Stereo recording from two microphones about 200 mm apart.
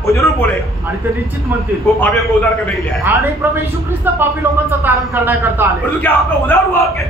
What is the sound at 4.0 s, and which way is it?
A man's voice, 10° right (ahead or behind).